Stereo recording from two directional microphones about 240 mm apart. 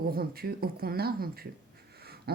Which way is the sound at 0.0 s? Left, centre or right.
Right.